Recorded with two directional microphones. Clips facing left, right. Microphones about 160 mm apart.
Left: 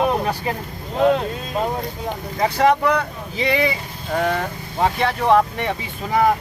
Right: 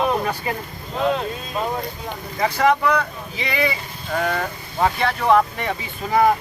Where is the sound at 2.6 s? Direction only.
35° left (ahead or behind).